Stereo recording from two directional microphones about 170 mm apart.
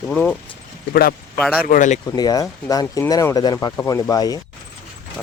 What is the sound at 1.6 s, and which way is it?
Speech, 50° left (ahead or behind).